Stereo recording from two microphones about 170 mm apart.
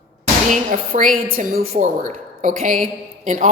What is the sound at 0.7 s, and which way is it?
Speech, 50° right (ahead or behind).